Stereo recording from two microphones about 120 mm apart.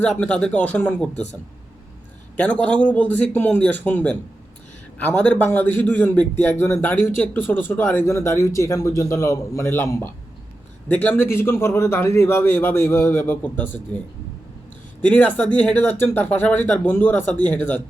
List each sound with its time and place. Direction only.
0.0 s speech: 10° left (ahead or behind)
2.3 s speech: 10° left (ahead or behind)
15.0 s speech: 15° left (ahead or behind)